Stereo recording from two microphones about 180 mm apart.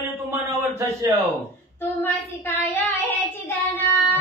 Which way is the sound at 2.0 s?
10° left (ahead or behind).